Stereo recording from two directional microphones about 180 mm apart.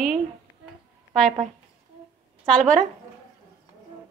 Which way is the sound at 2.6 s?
45° right (ahead or behind).